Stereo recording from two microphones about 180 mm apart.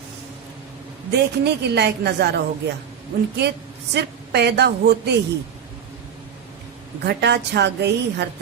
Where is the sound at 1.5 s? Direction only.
65° right (ahead or behind).